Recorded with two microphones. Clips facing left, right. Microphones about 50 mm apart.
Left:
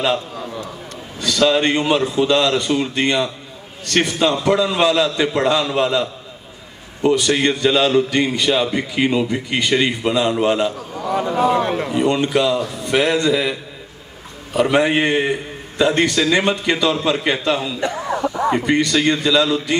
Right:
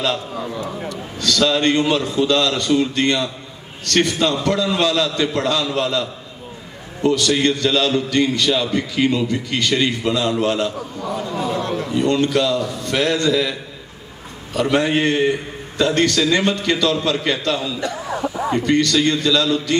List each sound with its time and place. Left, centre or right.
0.3 s a man's voice: centre
1.2 s a man's voice: centre
11.1 s a man's voice: left
17.9 s a sound: centre
18.2 s a sound: centre
18.5 s a man's voice: centre